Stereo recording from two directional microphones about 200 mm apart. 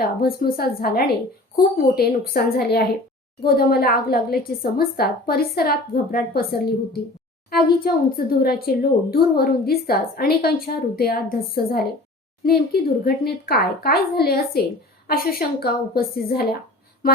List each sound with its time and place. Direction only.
0.0 s speech: 50° left (ahead or behind)